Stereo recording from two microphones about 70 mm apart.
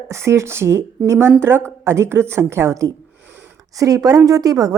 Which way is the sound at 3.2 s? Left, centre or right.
Right.